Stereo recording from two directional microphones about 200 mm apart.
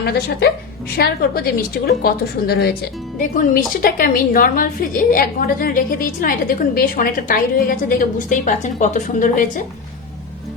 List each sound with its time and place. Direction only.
0.0 s a woman's voice: 50° left (ahead or behind)